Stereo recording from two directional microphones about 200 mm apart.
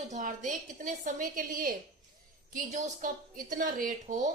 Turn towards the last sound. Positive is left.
turn(degrees=-40)  # may be behind; listen again after turning